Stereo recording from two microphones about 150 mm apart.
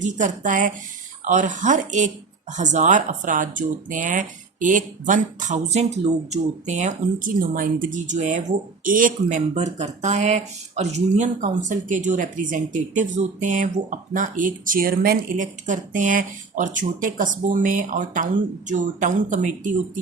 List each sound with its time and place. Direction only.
0.0 s speech: 55° right (ahead or behind)
9.6 s speech: 50° right (ahead or behind)